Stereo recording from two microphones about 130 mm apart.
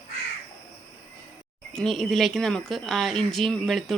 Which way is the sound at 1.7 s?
5° left (ahead or behind).